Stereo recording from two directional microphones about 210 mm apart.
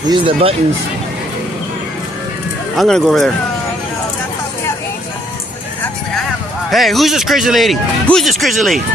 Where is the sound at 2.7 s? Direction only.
Centre (ahead or behind).